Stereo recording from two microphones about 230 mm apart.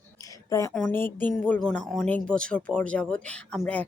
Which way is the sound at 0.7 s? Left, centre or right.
Centre.